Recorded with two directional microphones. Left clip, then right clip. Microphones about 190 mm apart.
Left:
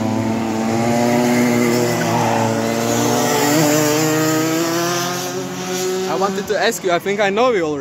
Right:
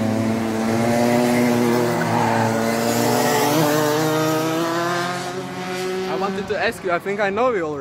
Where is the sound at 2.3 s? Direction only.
10° right (ahead or behind).